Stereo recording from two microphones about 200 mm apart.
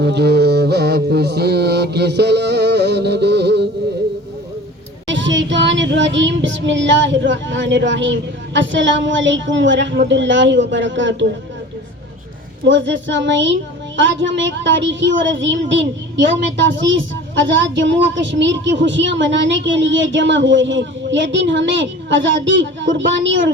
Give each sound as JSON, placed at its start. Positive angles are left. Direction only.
{"t": 0.0, "sound": "a woman's voice", "side_deg": -55}
{"t": 5.0, "sound": "a woman's voice", "side_deg": -65}
{"t": 12.6, "sound": "a woman's voice", "side_deg": -65}